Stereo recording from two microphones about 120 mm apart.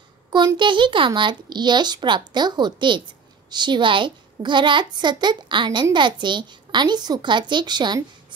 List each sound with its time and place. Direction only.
0.6 s speech: 40° right (ahead or behind)